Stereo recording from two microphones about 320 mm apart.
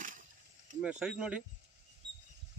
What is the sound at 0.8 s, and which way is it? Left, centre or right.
Speech, centre.